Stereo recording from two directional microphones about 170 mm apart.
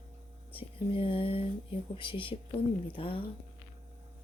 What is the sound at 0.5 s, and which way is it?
Speech, 30° left (ahead or behind).